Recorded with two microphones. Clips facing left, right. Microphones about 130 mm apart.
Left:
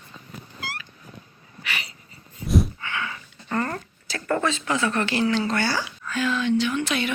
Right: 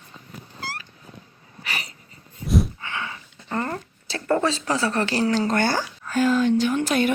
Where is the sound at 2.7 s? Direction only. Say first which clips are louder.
Left 1 dB; 30° right (ahead or behind).